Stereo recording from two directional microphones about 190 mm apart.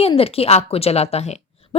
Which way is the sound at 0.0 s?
30° left (ahead or behind).